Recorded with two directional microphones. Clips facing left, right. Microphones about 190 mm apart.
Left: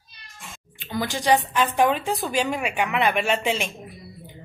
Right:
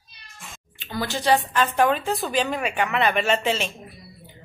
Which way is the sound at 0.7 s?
15° left (ahead or behind).